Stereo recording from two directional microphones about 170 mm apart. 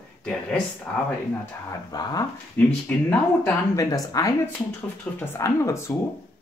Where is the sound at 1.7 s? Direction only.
25° left (ahead or behind).